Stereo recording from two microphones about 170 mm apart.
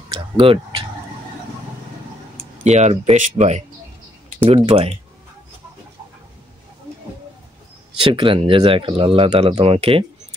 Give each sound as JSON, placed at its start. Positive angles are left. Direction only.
{"t": 0.1, "sound": "speech", "side_deg": -30}
{"t": 2.6, "sound": "speech", "side_deg": -40}
{"t": 8.0, "sound": "speech", "side_deg": -30}